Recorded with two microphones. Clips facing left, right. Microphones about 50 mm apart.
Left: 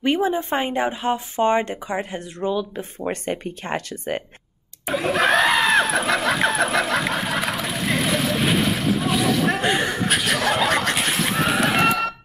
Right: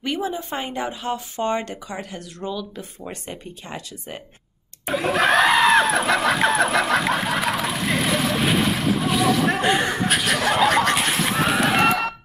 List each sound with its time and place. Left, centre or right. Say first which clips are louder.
0.0 s speech: left 5 dB; left
3.1 s speech: left 11 dB; left
4.8 s a sound: even; centre